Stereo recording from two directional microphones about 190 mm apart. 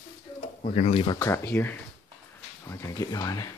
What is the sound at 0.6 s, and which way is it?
Speech, 35° left (ahead or behind).